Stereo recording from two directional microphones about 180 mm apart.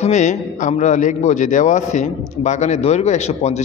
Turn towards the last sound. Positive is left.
turn(degrees=35)  # may be behind; listen again after turning